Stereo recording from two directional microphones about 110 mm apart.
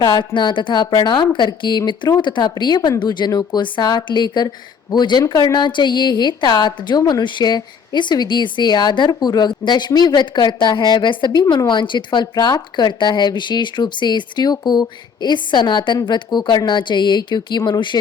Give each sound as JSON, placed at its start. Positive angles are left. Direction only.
{"t": 0.0, "sound": "a woman's voice", "side_deg": 45}